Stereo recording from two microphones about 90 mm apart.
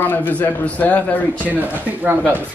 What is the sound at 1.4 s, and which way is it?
Speech, 20° right (ahead or behind).